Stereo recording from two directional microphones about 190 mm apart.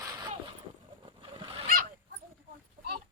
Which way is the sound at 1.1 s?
25° right (ahead or behind).